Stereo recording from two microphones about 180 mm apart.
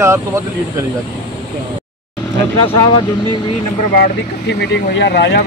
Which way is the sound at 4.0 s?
70° left (ahead or behind).